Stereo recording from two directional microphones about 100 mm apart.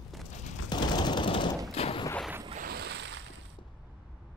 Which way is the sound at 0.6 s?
45° left (ahead or behind).